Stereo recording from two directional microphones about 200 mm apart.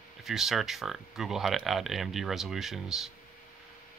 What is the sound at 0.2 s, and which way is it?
Speech, centre (ahead or behind).